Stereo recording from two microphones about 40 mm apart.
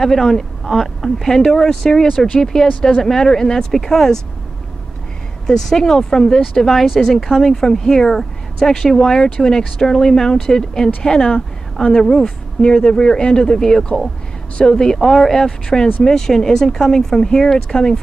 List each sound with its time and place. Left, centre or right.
0.0 s speech: centre
5.5 s speech: centre